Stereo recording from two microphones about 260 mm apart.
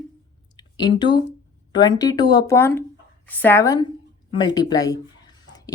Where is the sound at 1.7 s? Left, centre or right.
Centre.